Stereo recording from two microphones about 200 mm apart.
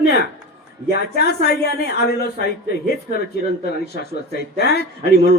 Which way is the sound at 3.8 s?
55° left (ahead or behind).